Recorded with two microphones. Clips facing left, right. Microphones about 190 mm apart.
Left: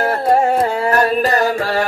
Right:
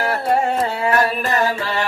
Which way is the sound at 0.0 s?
35° left (ahead or behind).